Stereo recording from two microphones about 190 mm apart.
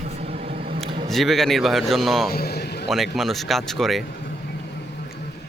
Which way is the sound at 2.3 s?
55° left (ahead or behind).